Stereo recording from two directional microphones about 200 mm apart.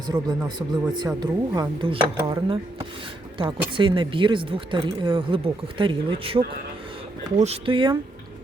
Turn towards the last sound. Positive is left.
turn(degrees=-25)  # may be behind; listen again after turning